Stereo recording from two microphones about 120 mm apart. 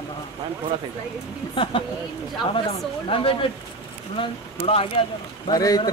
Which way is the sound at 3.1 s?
50° left (ahead or behind).